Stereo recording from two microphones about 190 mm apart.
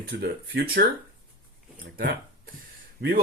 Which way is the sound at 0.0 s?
55° right (ahead or behind).